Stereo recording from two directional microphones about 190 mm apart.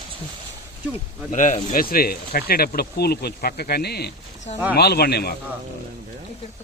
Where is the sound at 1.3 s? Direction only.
40° left (ahead or behind); by 5.3 s 55° left (ahead or behind).